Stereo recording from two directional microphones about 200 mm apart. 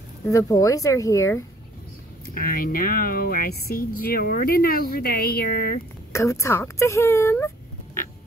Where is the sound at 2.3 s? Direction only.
45° left (ahead or behind).